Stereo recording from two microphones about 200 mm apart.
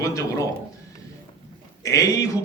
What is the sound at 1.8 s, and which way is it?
Speech, 15° left (ahead or behind).